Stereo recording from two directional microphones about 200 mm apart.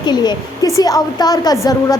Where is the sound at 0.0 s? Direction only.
20° left (ahead or behind).